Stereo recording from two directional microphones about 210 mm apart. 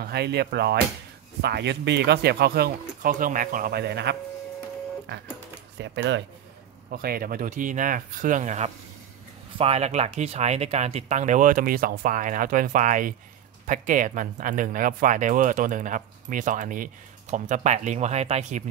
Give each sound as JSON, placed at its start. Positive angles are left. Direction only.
{"t": 0.0, "sound": "speech", "side_deg": -50}
{"t": 5.8, "sound": "speech", "side_deg": -55}
{"t": 6.9, "sound": "speech", "side_deg": -45}